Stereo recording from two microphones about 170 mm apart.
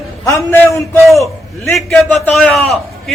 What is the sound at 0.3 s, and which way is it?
Speech, 15° left (ahead or behind).